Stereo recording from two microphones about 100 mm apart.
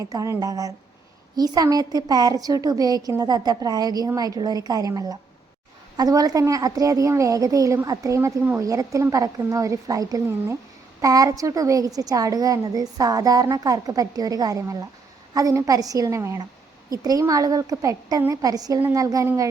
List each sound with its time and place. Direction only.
0.0 s a woman's voice: 35° right (ahead or behind)